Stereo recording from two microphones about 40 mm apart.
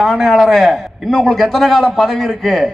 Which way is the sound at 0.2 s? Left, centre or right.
Centre.